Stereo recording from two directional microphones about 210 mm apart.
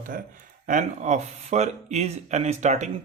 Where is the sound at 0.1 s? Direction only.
40° right (ahead or behind).